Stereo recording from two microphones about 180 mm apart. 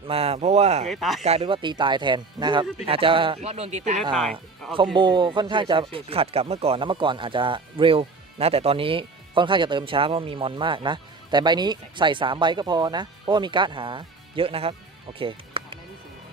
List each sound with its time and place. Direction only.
0.1 s speech: 35° right (ahead or behind)
0.9 s speech: centre (ahead or behind)
1.2 s speech: 35° right (ahead or behind)
4.1 s speech: centre (ahead or behind)
4.9 s speech: 25° right (ahead or behind)
15.2 s music: 30° right (ahead or behind)